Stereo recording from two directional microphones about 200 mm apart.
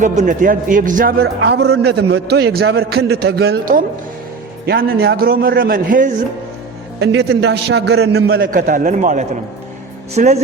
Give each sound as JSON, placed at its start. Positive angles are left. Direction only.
{"t": 0.0, "sound": "a man's voice", "side_deg": -40}
{"t": 1.2, "sound": "a man's voice", "side_deg": -60}
{"t": 7.0, "sound": "a man's voice", "side_deg": -60}
{"t": 8.3, "sound": "a man's voice", "side_deg": -45}